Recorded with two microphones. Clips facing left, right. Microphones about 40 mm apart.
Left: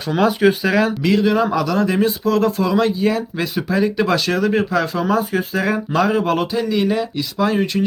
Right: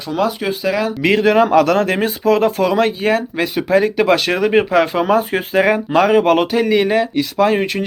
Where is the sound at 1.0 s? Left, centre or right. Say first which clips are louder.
Right 3 dB; right.